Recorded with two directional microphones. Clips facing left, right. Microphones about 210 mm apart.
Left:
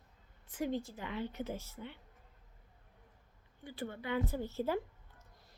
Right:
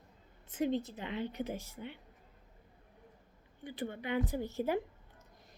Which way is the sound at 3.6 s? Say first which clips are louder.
Right 2 dB; 20° right (ahead or behind).